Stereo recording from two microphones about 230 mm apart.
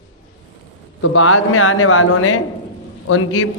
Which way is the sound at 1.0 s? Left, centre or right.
Left.